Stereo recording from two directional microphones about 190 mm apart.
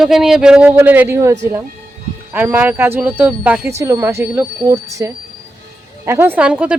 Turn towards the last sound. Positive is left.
turn(degrees=-5)  # may be behind; listen again after turning